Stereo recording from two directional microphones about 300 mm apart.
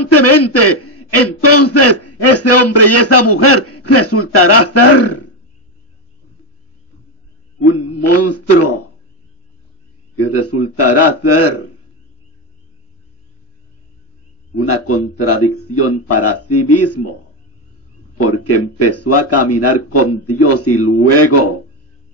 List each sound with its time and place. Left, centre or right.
0.0 s a man's voice: left
8.0 s a man's voice: left
10.1 s a man's voice: left
14.6 s a man's voice: left
18.1 s a man's voice: left